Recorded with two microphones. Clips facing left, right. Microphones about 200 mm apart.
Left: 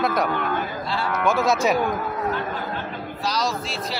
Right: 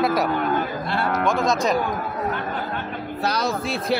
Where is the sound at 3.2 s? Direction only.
60° right (ahead or behind).